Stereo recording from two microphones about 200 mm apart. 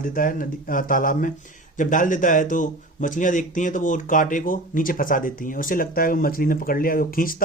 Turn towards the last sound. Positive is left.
turn(degrees=45)  # may be behind; listen again after turning